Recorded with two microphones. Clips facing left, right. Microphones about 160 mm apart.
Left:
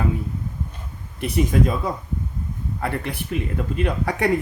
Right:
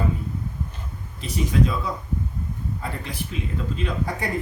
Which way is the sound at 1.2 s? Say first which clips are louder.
Left 3 dB; 55° left (ahead or behind).